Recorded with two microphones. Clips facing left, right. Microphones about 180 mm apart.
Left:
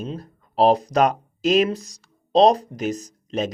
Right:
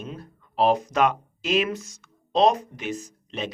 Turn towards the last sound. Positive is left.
turn(degrees=40)  # may be behind; listen again after turning